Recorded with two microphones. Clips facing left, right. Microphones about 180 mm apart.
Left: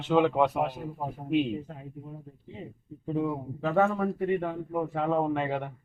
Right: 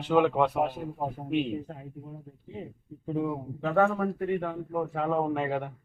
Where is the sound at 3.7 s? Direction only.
5° left (ahead or behind).